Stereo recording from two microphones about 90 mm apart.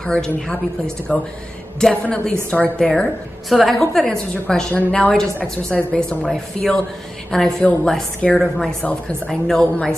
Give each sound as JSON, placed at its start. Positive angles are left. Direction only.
{"t": 0.0, "sound": "a woman's voice", "side_deg": 5}
{"t": 2.9, "sound": "a woman's voice", "side_deg": 5}
{"t": 4.7, "sound": "a woman's voice", "side_deg": 15}